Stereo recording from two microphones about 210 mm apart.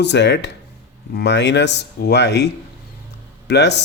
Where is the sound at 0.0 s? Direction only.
55° left (ahead or behind).